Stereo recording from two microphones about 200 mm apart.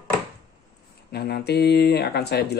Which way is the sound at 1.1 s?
55° left (ahead or behind).